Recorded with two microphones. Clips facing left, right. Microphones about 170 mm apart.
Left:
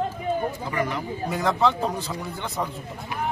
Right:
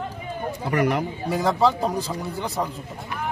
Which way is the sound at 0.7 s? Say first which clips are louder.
Right 5 dB; 70° right (ahead or behind).